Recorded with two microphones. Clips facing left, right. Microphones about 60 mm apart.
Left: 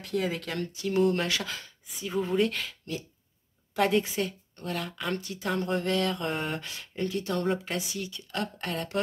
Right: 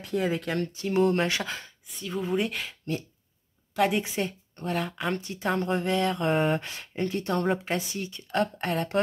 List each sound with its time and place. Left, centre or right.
0.1 s speech: centre
0.6 s speech: right
1.9 s speech: centre
2.3 s speech: centre
3.7 s a woman's voice: centre
4.0 s speech: right
6.6 s a woman's voice: right